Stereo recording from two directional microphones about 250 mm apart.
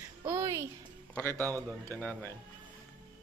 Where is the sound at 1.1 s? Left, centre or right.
Centre.